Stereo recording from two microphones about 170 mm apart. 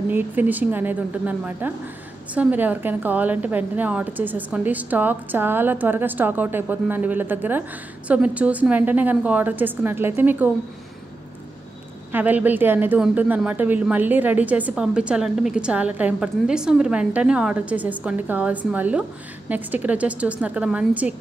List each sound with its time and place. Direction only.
0.1 s speech: 10° right (ahead or behind)
12.1 s speech: 10° right (ahead or behind)